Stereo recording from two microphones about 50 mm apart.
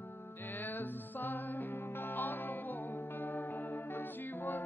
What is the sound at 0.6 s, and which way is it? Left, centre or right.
Music, left.